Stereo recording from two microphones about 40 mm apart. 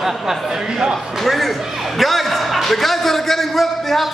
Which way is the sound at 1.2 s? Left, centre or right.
Centre.